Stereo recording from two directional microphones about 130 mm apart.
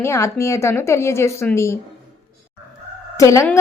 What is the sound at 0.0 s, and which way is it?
A woman's voice, 20° left (ahead or behind).